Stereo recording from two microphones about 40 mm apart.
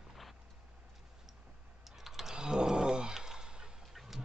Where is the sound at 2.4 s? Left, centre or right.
Centre.